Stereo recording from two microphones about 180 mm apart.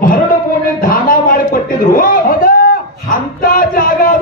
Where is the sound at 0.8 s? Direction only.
55° left (ahead or behind).